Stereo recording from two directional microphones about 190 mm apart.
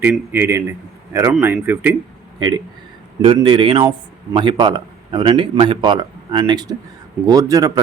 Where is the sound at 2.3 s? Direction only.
25° right (ahead or behind).